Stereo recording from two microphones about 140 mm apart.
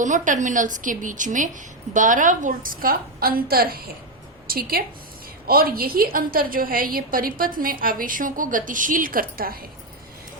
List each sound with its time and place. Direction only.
0.0 s a woman's voice: 60° right (ahead or behind); by 9.6 s 90° right